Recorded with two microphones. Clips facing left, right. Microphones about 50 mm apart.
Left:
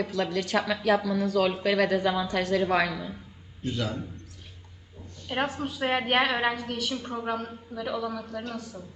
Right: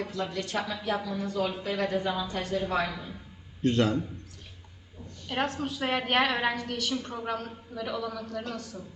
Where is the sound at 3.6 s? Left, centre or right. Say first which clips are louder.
Right 6 dB; right.